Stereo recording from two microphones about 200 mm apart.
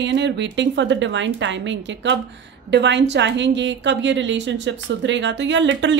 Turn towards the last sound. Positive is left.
turn(degrees=-65)  # may be behind; listen again after turning